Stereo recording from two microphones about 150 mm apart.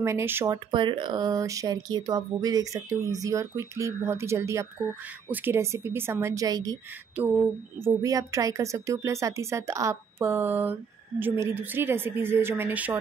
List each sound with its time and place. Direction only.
0.0 s speech: 15° right (ahead or behind)
0.5 s speech: 30° right (ahead or behind)
7.8 s speech: 20° right (ahead or behind)